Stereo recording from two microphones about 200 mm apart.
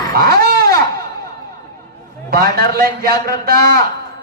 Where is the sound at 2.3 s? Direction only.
50° right (ahead or behind).